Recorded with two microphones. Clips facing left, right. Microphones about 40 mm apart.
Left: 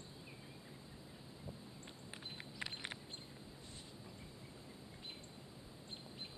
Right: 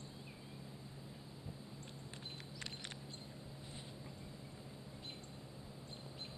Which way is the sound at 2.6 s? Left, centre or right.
Centre.